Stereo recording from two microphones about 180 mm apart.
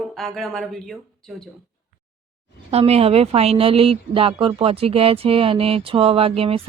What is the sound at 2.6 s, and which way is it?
A woman's voice, 35° right (ahead or behind).